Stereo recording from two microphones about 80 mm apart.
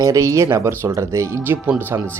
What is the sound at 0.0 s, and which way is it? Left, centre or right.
Speech, right.